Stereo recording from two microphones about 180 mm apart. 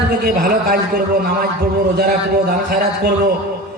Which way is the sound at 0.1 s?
55° right (ahead or behind).